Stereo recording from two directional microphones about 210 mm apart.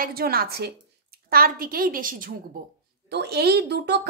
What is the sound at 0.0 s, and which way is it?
Speech, 45° right (ahead or behind).